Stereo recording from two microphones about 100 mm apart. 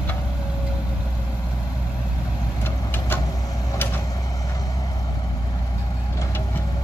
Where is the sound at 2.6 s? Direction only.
20° left (ahead or behind).